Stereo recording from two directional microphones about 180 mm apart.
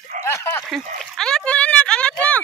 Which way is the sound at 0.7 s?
5° left (ahead or behind).